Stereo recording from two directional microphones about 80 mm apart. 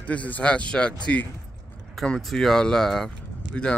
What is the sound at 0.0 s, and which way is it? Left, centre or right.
Speech, centre.